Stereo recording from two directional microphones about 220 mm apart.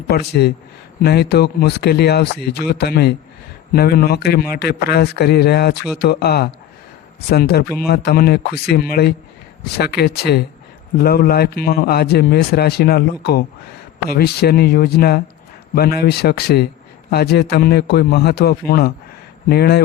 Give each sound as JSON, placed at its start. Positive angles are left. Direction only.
{"t": 0.1, "sound": "a man's voice", "side_deg": 45}